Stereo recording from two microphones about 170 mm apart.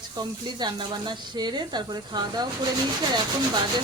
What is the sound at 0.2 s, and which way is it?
Speech, 25° right (ahead or behind).